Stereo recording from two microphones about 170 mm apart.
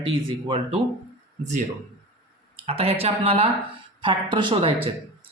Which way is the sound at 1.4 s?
45° right (ahead or behind).